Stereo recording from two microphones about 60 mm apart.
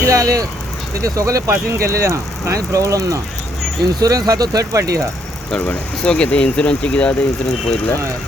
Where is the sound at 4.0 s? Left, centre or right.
Right.